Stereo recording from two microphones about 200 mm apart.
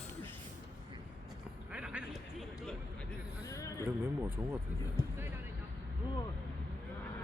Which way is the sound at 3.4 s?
15° left (ahead or behind).